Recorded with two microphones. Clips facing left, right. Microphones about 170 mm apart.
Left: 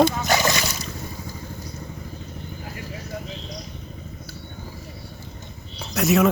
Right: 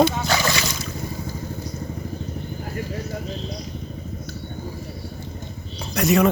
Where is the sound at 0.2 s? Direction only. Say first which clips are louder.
Left 1 dB; 20° left (ahead or behind).